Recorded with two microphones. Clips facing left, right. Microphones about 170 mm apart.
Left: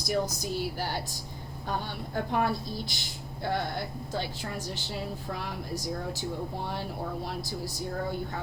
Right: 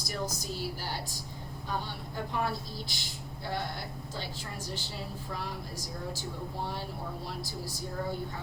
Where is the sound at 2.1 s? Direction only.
60° left (ahead or behind).